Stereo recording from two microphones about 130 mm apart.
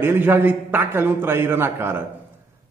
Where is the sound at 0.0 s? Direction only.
15° right (ahead or behind).